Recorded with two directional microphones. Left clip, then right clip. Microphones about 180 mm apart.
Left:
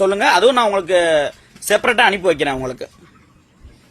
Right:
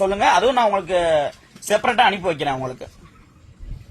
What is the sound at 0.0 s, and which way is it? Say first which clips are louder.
A man's voice: left 3 dB; 35° left (ahead or behind).